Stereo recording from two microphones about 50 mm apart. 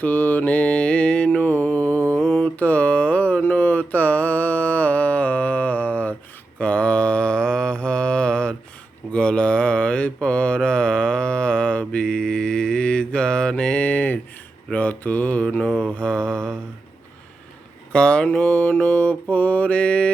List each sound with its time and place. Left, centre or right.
0.0 s mantra: left
1.4 s mantra: left
15.6 s mantra: centre
17.9 s mantra: centre